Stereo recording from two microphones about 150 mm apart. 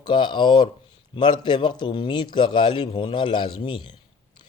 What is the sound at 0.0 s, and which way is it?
A man's voice, 30° left (ahead or behind).